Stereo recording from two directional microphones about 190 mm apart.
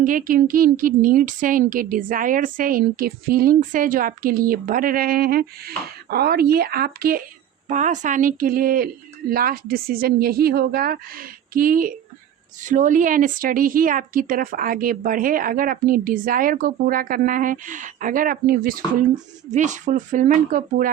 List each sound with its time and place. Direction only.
0.0 s a woman's voice: 45° right (ahead or behind)
7.7 s a woman's voice: 40° right (ahead or behind)